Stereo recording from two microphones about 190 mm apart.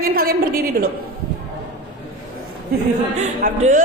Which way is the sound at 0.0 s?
50° right (ahead or behind).